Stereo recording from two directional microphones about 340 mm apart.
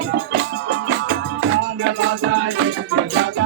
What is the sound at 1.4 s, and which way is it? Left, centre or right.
Music, right.